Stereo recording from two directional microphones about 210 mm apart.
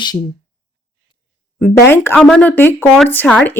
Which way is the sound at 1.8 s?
10° left (ahead or behind).